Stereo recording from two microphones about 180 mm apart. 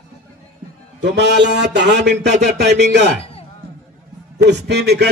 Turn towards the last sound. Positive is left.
turn(degrees=-65)  # may be behind; listen again after turning